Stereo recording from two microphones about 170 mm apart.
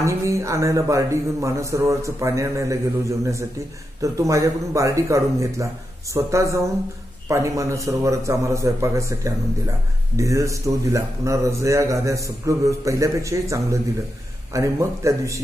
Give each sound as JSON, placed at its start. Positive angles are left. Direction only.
{"t": 0.0, "sound": "a man's voice", "side_deg": -20}